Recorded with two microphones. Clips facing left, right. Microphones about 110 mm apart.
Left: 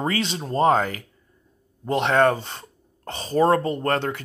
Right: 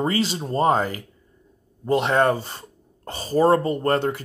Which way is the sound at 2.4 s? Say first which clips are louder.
Even; 5° right (ahead or behind).